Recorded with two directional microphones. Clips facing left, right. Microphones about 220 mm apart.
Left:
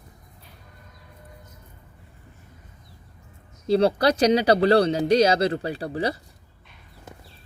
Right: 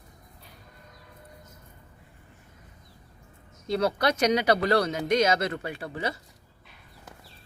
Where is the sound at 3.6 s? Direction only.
30° left (ahead or behind).